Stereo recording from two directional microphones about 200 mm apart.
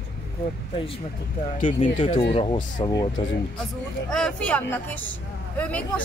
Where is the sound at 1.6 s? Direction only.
30° left (ahead or behind).